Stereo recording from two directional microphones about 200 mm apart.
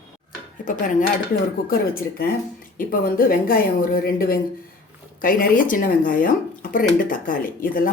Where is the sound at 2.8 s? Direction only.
45° left (ahead or behind).